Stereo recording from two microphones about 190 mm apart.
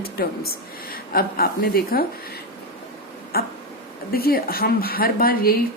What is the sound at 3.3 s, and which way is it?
Speech, 55° left (ahead or behind).